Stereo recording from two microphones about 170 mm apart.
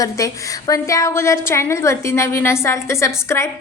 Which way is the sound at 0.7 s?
20° left (ahead or behind).